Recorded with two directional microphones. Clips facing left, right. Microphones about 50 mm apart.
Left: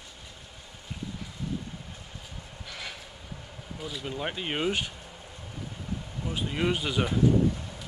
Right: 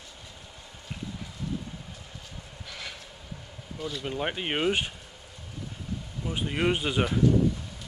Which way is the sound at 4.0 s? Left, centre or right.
Centre.